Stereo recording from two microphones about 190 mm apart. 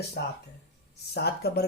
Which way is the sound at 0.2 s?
55° left (ahead or behind).